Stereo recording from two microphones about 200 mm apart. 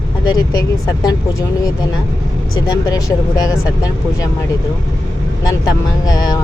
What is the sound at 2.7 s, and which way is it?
Speech, 20° left (ahead or behind).